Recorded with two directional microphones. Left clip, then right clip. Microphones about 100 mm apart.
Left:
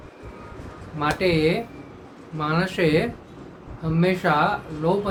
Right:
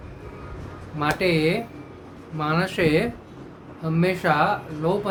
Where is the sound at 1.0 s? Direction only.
15° right (ahead or behind).